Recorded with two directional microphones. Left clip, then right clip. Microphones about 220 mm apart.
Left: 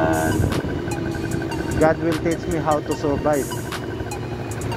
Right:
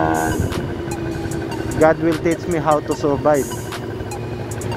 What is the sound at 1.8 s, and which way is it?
Speech, 30° right (ahead or behind).